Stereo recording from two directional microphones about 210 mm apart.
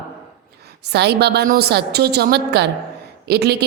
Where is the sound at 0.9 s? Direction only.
55° right (ahead or behind).